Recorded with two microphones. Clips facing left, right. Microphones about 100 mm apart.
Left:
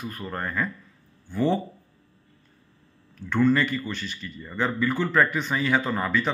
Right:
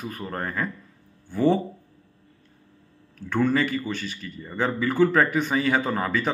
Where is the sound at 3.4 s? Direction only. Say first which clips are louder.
Left 1 dB; 50° right (ahead or behind).